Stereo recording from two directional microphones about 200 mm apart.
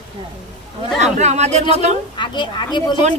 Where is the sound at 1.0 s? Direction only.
35° right (ahead or behind).